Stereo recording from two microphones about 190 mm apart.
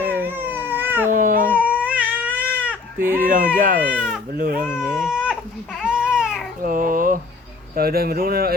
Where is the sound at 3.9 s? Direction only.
Centre (ahead or behind).